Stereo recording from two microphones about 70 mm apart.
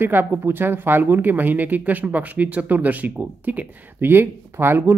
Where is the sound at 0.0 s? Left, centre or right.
Right.